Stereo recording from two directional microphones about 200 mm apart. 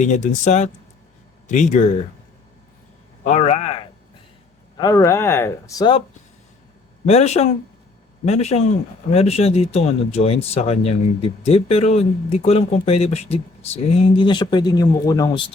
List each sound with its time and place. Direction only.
0.0 s speech: 35° left (ahead or behind)
3.2 s a man's voice: 35° left (ahead or behind)
4.8 s speech: 15° left (ahead or behind)
7.0 s speech: 35° left (ahead or behind)